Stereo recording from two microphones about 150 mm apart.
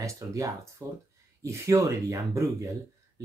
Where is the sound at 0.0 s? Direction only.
20° right (ahead or behind).